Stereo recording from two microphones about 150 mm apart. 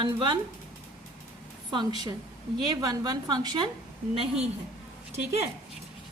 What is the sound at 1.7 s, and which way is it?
A woman's voice, 30° right (ahead or behind).